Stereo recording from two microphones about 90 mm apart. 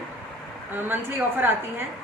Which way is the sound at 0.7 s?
25° right (ahead or behind).